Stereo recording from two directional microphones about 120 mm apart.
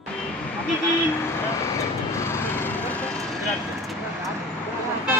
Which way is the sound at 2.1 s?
20° left (ahead or behind).